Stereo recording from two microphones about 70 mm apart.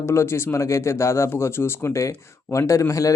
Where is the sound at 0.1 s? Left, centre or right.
Left.